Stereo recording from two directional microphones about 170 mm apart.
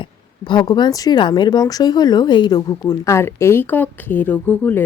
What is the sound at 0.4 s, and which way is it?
Speech, 25° left (ahead or behind).